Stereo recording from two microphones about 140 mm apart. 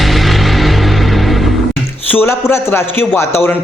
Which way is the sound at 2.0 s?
15° left (ahead or behind).